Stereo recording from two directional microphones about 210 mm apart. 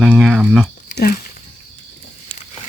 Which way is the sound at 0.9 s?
45° left (ahead or behind).